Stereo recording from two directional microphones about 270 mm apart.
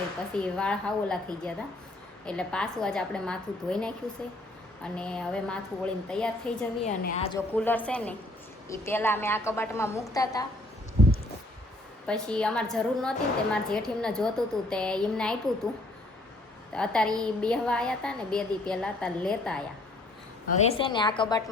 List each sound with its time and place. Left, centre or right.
0.3 s a woman's voice: centre
6.8 s a woman's voice: left
7.5 s a woman's voice: centre
12.0 s a woman's voice: centre
16.7 s a woman's voice: centre
20.7 s a woman's voice: centre